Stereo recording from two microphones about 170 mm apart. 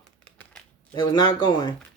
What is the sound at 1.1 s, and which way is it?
Speech, 25° left (ahead or behind).